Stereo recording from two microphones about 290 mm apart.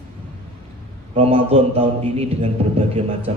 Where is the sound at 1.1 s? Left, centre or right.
Centre.